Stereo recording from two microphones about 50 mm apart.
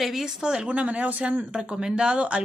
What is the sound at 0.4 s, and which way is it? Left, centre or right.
Speech, centre.